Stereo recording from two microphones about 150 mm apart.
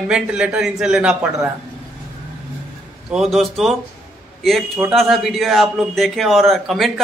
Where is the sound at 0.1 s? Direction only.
5° right (ahead or behind).